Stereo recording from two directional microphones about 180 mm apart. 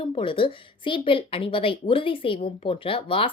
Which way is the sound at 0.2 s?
30° left (ahead or behind).